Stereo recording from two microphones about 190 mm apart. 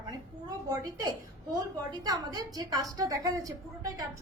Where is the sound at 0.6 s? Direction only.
20° right (ahead or behind).